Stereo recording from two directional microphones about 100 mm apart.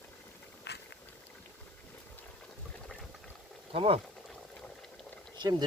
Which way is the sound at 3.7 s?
70° right (ahead or behind).